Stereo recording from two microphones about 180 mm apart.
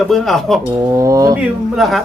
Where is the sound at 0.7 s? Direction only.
20° right (ahead or behind).